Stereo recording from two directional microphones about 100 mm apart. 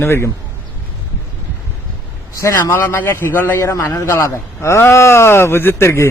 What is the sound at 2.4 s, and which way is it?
A man's voice, 25° left (ahead or behind).